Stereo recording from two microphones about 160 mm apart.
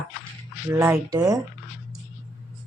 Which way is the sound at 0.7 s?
15° right (ahead or behind).